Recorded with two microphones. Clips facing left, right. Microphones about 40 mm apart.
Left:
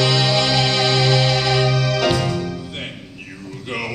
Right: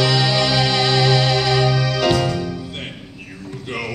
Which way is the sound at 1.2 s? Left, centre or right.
Centre.